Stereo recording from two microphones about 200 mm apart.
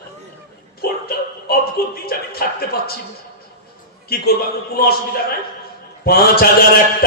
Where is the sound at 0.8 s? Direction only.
50° left (ahead or behind).